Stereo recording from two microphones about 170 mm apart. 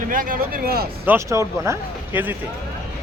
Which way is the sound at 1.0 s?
15° right (ahead or behind).